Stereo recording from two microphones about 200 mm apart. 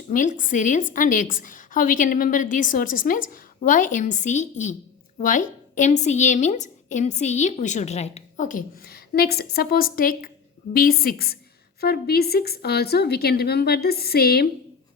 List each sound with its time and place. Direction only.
0.1 s a woman's voice: 40° left (ahead or behind)